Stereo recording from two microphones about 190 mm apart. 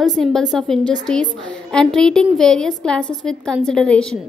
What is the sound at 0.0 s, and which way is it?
A woman's voice, centre (ahead or behind).